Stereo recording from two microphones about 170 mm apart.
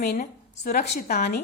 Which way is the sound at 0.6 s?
45° left (ahead or behind).